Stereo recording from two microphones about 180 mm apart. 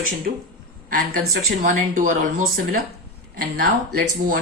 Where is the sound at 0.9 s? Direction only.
50° right (ahead or behind).